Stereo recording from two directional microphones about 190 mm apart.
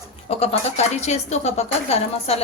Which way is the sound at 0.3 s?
30° left (ahead or behind).